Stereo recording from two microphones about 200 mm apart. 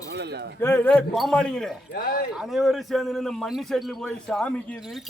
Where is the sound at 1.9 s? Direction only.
45° left (ahead or behind).